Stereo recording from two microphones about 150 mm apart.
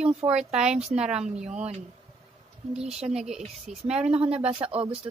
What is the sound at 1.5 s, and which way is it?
Speech, 45° right (ahead or behind).